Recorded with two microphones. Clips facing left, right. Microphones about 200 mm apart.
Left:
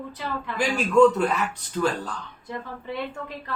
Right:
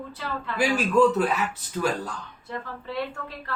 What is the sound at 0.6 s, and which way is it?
A man's voice, 5° right (ahead or behind).